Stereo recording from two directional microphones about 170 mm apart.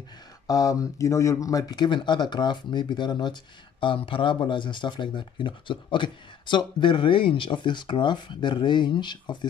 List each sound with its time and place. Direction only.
0.5 s speech: 20° left (ahead or behind)